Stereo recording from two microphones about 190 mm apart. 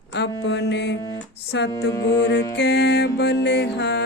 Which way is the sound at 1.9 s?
20° left (ahead or behind).